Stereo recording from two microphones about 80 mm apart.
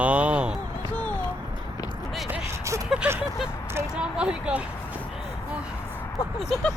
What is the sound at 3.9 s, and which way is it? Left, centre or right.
Vehicle, centre.